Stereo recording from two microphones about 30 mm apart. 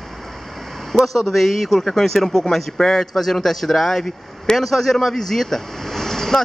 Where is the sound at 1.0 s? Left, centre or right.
Centre.